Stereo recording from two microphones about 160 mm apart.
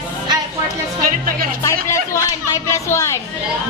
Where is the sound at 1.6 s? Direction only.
20° left (ahead or behind).